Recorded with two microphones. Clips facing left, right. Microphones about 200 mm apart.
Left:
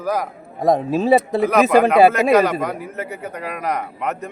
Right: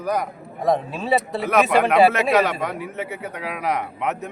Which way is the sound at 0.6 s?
40° left (ahead or behind).